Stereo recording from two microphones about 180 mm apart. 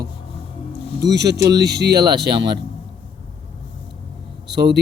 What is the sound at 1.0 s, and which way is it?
Speech, 70° right (ahead or behind).